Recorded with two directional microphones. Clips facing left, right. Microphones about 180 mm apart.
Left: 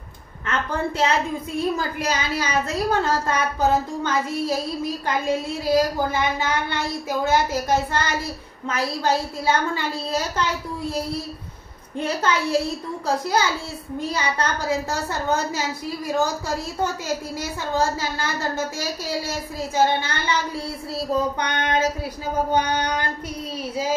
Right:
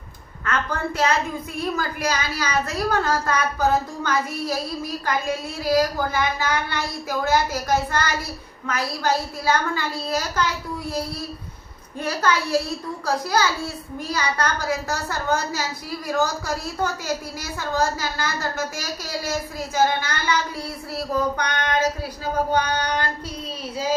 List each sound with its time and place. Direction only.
0.5 s a woman's voice: 25° left (ahead or behind)
12.0 s a woman's voice: 25° left (ahead or behind)